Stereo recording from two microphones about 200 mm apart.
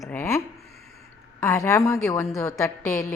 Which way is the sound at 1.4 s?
15° left (ahead or behind).